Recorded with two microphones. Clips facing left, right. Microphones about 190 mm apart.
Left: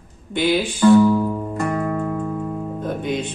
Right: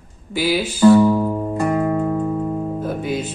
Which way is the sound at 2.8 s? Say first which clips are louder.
Right 1 dB; 5° right (ahead or behind).